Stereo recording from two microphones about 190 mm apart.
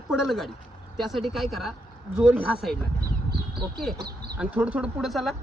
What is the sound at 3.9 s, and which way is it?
Speech, 55° right (ahead or behind).